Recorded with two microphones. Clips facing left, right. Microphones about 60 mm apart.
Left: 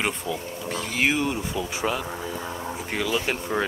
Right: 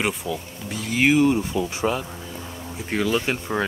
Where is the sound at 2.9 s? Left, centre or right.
Centre.